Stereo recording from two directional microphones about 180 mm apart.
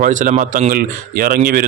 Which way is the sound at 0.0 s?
45° right (ahead or behind).